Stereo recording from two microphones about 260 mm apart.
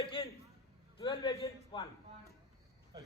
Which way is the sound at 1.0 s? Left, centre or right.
Centre.